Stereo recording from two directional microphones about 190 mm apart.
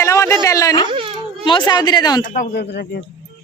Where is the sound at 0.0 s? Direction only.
15° left (ahead or behind).